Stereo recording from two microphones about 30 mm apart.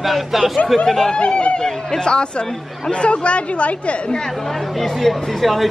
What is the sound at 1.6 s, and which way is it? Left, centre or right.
Speech, left.